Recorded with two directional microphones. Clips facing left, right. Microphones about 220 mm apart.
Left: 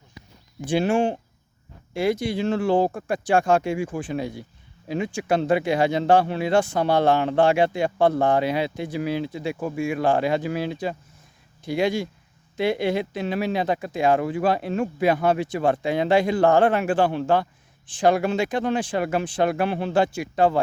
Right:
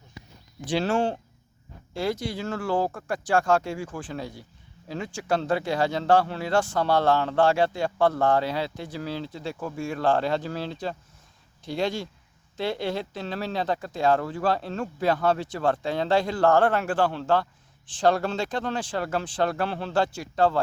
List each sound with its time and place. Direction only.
0.7 s speech: 10° left (ahead or behind)